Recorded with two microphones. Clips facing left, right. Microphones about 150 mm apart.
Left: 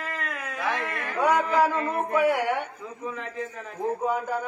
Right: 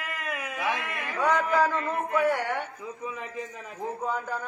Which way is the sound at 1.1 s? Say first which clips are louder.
Left 2 dB; 10° left (ahead or behind).